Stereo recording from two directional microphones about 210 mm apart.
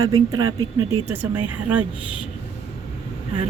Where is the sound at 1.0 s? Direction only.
10° right (ahead or behind).